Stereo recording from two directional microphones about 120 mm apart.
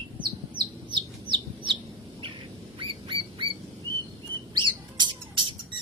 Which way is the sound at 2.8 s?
45° right (ahead or behind).